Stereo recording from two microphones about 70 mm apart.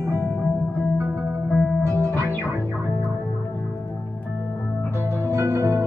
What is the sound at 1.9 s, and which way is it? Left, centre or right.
Music, right.